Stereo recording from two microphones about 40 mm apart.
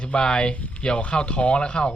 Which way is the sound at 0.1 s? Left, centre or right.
Left.